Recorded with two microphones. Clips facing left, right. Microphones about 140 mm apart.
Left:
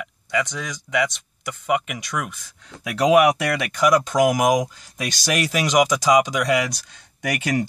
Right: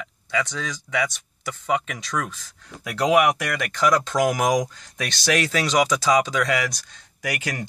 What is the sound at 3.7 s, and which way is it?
Speech, 15° left (ahead or behind).